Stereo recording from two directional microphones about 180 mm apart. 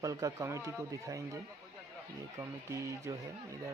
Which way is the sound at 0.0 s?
20° right (ahead or behind).